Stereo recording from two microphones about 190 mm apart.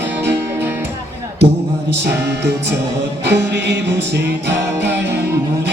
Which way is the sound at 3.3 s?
65° right (ahead or behind).